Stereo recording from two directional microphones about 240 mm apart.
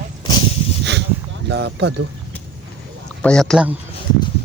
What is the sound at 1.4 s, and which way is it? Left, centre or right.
Speech, right.